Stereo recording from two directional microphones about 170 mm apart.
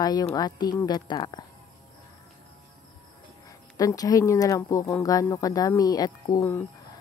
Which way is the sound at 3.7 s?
20° left (ahead or behind).